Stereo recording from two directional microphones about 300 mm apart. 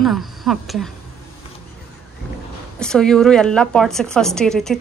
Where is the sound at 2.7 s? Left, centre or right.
Centre.